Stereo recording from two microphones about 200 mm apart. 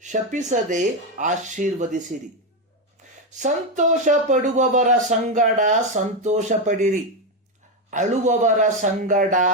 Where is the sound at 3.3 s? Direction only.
40° right (ahead or behind).